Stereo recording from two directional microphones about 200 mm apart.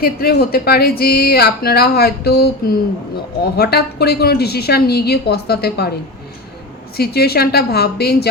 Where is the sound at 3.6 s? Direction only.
55° left (ahead or behind).